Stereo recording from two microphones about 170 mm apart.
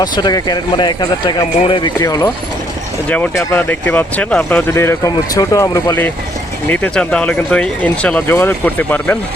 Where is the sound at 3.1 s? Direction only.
10° left (ahead or behind).